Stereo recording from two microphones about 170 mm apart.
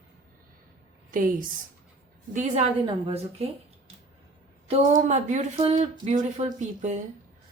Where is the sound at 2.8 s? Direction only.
30° right (ahead or behind).